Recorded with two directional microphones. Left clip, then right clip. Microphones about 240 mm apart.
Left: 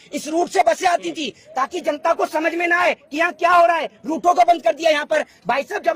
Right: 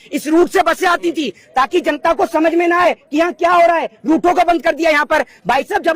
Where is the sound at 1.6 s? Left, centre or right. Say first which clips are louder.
Right 3 dB; right.